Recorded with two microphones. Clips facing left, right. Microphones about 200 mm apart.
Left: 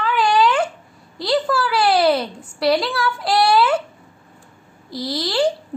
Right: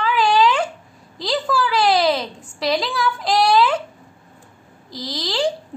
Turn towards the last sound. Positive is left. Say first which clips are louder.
# left 3 dB
turn(degrees=5)  # may be behind; listen again after turning